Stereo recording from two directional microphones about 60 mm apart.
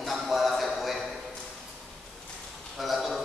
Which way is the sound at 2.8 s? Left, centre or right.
Centre.